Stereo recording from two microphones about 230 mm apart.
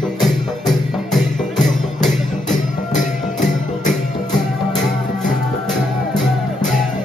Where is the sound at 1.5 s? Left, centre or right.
Left.